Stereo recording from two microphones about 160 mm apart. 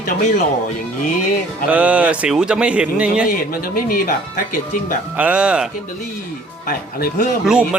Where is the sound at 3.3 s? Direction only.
60° left (ahead or behind).